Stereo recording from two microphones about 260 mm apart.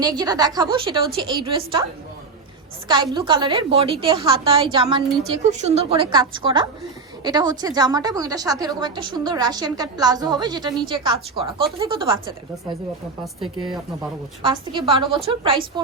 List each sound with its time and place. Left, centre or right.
0.0 s a woman's voice: centre
2.8 s a woman's voice: centre